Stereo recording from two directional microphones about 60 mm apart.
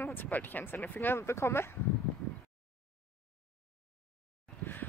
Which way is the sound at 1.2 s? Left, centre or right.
Left.